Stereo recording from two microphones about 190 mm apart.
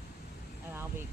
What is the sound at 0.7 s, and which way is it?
Speech, 10° right (ahead or behind).